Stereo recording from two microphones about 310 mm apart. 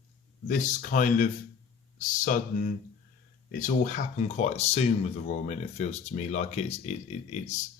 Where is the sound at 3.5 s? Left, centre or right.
Left.